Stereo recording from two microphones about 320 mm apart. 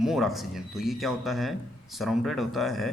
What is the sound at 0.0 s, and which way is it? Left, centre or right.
Speech, centre.